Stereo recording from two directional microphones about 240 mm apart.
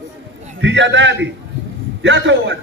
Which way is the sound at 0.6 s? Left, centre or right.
Right.